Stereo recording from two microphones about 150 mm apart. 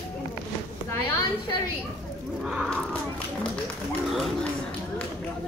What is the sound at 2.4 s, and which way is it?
Speech, 5° right (ahead or behind).